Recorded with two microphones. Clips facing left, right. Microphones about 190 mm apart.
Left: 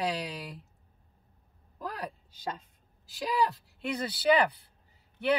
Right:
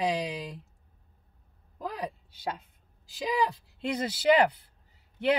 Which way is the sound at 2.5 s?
15° right (ahead or behind).